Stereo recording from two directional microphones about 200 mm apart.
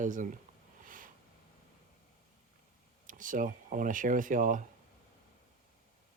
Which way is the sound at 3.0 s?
40° right (ahead or behind).